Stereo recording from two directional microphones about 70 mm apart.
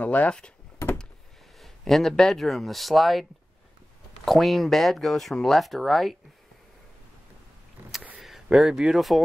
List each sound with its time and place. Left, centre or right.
0.0 s speech: centre
1.6 s speech: centre
8.5 s speech: centre